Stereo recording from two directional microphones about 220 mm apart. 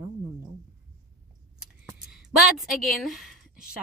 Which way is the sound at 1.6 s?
Centre (ahead or behind).